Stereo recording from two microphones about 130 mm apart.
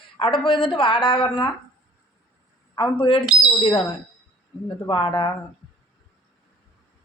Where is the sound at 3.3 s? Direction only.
5° right (ahead or behind).